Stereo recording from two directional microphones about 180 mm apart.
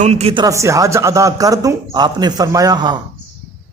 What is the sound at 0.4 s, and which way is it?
A man's voice, 15° right (ahead or behind).